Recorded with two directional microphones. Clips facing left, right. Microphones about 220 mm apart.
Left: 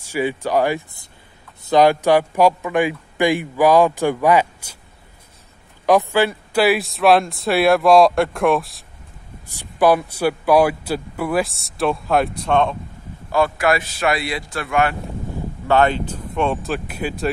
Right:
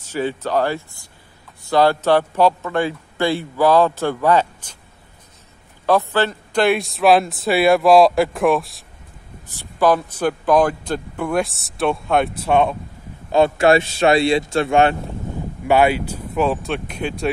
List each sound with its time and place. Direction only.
0.0 s speech: 10° left (ahead or behind)
5.9 s speech: 15° left (ahead or behind)
9.5 s speech: 10° left (ahead or behind); by 12.7 s 10° right (ahead or behind)
13.3 s a man's voice: 25° right (ahead or behind)
15.6 s speech: 10° right (ahead or behind)